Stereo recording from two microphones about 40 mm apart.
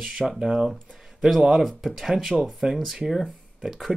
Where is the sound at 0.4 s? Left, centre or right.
Centre.